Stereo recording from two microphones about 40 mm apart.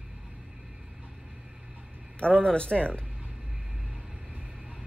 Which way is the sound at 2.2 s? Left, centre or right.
Left.